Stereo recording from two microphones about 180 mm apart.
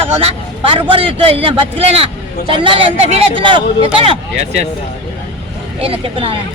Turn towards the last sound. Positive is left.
turn(degrees=-30)  # may be behind; listen again after turning